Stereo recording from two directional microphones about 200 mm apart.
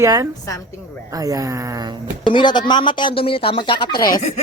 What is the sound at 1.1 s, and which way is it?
Speech, 15° right (ahead or behind).